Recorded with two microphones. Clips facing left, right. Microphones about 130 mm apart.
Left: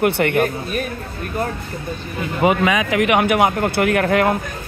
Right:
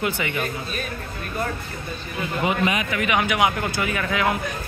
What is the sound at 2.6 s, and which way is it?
Speech, 80° left.